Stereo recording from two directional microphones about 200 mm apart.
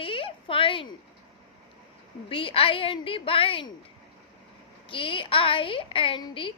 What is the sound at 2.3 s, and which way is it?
A woman's voice, 25° left (ahead or behind).